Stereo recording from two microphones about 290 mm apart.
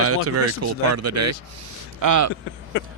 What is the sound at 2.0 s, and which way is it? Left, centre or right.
Speech, right.